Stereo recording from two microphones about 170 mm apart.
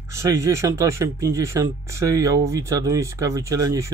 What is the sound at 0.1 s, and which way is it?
Speech, 15° right (ahead or behind).